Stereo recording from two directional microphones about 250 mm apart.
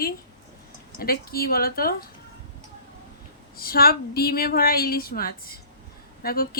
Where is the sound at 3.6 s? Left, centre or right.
Left.